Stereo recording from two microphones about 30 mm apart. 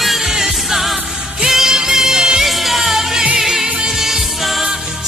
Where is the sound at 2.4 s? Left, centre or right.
Centre.